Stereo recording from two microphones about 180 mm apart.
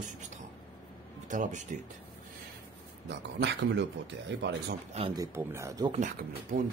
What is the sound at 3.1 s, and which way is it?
Speech, 75° right (ahead or behind).